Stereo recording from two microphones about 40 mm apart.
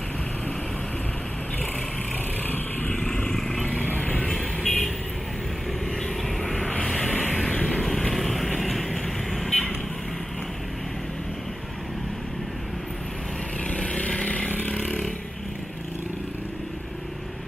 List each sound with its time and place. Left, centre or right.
2.4 s vehicle: left
3.1 s vehicle: centre
3.3 s vehicle: centre
3.9 s vehicle: left
4.3 s vehicle: centre
7.1 s vehicle: left
7.8 s vehicle: centre
9.5 s vehicle: centre
13.7 s vehicle: left
14.8 s vehicle: centre